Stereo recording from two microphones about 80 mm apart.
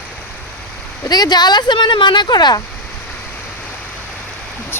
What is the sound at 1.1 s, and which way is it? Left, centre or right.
Speech, left.